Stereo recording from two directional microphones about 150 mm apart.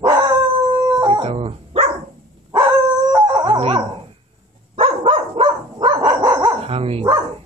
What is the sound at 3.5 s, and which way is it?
Dog, 40° right (ahead or behind).